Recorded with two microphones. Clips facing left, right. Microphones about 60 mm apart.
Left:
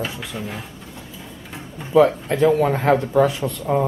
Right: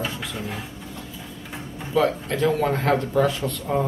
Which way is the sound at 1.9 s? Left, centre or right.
Centre.